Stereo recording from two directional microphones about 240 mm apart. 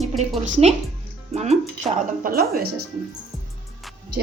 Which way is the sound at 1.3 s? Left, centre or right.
Right.